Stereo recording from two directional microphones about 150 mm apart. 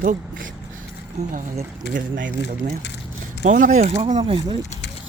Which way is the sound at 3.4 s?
60° right (ahead or behind).